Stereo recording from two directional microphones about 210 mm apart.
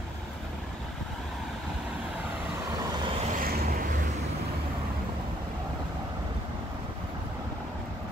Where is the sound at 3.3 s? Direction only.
40° right (ahead or behind).